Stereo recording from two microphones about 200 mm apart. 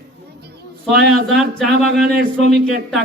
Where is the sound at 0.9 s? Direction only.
Centre (ahead or behind).